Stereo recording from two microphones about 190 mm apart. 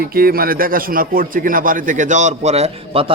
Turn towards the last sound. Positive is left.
turn(degrees=-30)  # may be behind; listen again after turning